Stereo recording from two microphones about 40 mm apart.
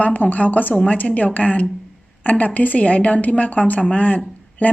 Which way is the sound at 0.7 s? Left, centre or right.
Left.